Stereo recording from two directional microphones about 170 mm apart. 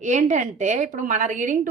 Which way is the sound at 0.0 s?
45° right (ahead or behind).